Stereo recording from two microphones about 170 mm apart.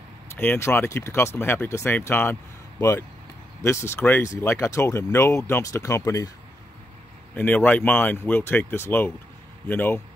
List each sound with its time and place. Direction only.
0.4 s speech: 15° left (ahead or behind)
7.3 s speech: 10° left (ahead or behind)